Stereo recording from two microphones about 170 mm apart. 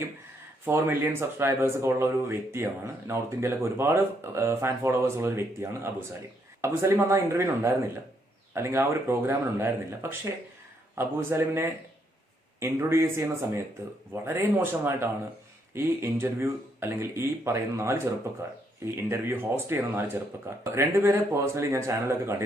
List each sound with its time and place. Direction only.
0.6 s speech: 10° right (ahead or behind)